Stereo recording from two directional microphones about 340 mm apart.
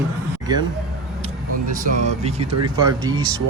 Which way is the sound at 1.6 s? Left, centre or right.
Right.